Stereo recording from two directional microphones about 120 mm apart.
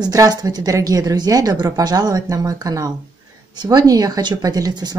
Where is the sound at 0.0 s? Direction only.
30° right (ahead or behind).